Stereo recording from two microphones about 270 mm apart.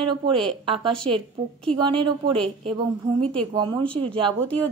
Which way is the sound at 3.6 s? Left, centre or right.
Centre.